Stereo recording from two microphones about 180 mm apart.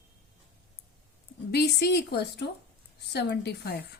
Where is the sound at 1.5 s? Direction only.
65° left (ahead or behind).